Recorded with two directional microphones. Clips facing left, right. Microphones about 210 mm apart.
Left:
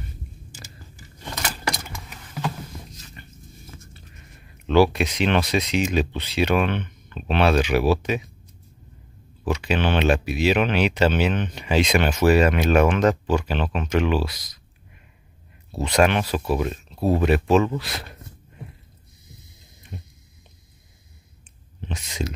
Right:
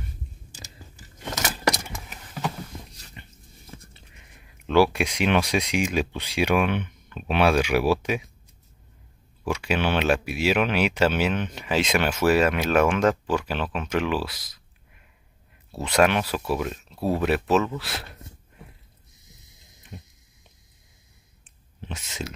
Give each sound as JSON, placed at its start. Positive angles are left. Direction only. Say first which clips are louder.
{"t": 3.2, "sound": "dog", "louder": "right 4 dB", "side_deg": -20}
{"t": 3.9, "sound": "a sound", "louder": "left 5 dB", "side_deg": -15}
{"t": 4.9, "sound": "speech", "louder": "left 1 dB", "side_deg": -10}
{"t": 9.4, "sound": "speech", "louder": "left 2 dB", "side_deg": -10}
{"t": 15.8, "sound": "speech", "louder": "left 1 dB", "side_deg": -5}
{"t": 19.9, "sound": "a sound", "louder": "left 3 dB", "side_deg": 0}
{"t": 21.8, "sound": "speech", "louder": "left 4 dB", "side_deg": -5}